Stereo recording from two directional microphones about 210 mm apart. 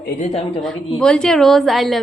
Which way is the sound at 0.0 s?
35° left (ahead or behind).